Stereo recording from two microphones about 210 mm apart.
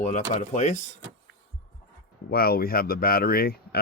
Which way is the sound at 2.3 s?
45° left (ahead or behind).